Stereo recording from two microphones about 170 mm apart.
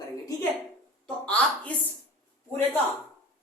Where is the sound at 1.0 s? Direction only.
5° left (ahead or behind).